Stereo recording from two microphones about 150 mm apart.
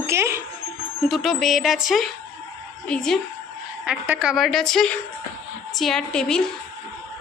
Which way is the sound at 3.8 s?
10° right (ahead or behind).